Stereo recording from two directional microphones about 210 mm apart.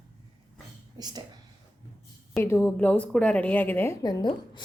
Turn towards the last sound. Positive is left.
turn(degrees=20)  # may be behind; listen again after turning